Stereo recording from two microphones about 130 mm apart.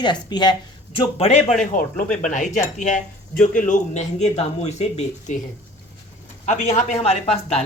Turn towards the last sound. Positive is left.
turn(degrees=50)  # may be behind; listen again after turning